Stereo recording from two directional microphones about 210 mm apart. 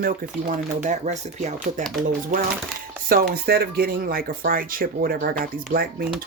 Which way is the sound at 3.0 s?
45° right (ahead or behind).